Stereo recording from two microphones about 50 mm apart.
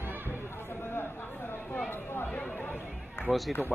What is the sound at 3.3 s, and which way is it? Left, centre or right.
Speech, centre.